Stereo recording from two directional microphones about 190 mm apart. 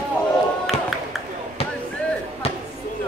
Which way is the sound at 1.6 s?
30° left (ahead or behind).